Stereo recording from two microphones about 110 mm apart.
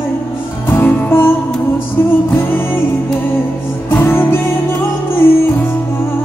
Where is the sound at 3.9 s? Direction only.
20° left (ahead or behind).